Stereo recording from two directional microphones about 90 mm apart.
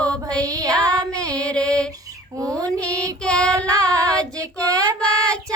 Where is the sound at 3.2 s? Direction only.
10° left (ahead or behind).